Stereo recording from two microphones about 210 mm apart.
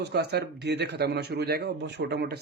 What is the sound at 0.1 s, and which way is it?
Speech, 50° right (ahead or behind).